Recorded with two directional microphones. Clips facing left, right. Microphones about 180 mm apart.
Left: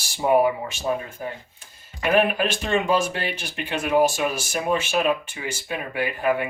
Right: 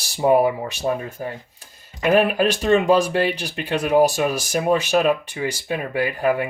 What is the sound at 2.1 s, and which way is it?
Speech, 40° right (ahead or behind).